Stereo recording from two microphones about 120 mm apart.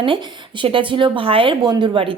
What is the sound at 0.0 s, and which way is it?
Speech, 45° right (ahead or behind).